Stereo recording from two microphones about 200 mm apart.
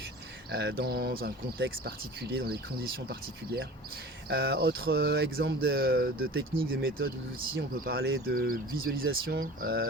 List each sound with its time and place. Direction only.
0.5 s speech: 55° right (ahead or behind)